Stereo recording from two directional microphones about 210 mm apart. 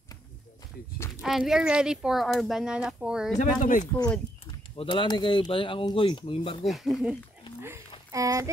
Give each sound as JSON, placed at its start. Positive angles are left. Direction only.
{"t": 1.2, "sound": "speech", "side_deg": 0}
{"t": 3.3, "sound": "speech", "side_deg": 35}
{"t": 3.9, "sound": "speech", "side_deg": 10}
{"t": 4.7, "sound": "speech", "side_deg": 25}
{"t": 6.6, "sound": "speech", "side_deg": 0}
{"t": 8.1, "sound": "speech", "side_deg": -15}